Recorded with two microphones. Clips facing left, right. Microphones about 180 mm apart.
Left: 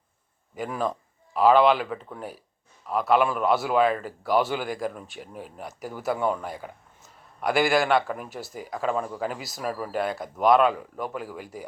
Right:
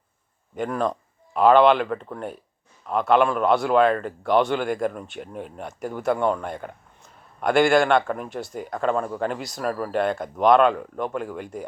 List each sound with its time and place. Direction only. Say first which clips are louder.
0.5 s a man's voice: right 4 dB; 5° left (ahead or behind)